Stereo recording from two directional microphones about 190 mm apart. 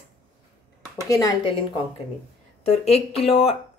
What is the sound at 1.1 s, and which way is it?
Speech, 20° left (ahead or behind).